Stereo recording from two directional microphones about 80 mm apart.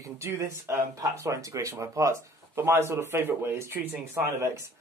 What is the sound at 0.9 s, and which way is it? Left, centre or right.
Speech, right.